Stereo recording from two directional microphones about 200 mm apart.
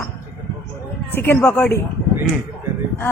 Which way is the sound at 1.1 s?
10° left (ahead or behind).